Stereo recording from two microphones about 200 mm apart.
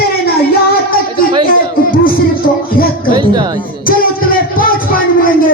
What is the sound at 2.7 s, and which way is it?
Speech, 45° left (ahead or behind).